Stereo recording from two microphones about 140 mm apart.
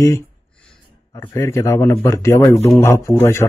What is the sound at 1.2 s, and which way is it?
Speech, 20° left (ahead or behind).